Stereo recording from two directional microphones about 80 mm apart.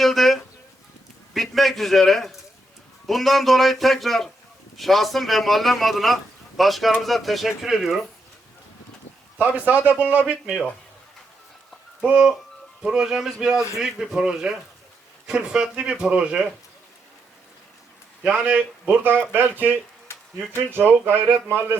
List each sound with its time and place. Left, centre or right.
0.0 s a sound: centre
1.3 s a man's voice: centre
9.6 s speech: right
10.4 s speech: centre
12.0 s speech: centre
18.3 s speech: centre
18.9 s speech: right